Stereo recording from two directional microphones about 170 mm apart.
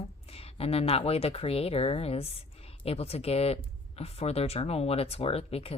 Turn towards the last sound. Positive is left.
turn(degrees=35)  # may be behind; listen again after turning